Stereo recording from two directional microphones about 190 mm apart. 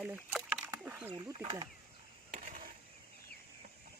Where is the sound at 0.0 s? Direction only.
5° right (ahead or behind).